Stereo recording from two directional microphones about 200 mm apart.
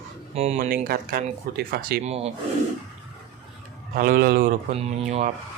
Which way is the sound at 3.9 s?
45° right (ahead or behind).